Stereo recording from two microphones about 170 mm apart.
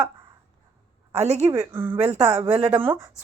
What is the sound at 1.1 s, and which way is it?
Speech, 40° right (ahead or behind).